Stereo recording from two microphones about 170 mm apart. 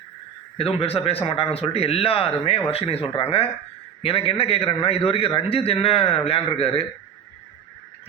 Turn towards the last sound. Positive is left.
turn(degrees=35)  # may be behind; listen again after turning